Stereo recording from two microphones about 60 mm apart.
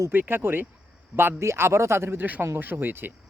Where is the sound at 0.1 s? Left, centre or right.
Right.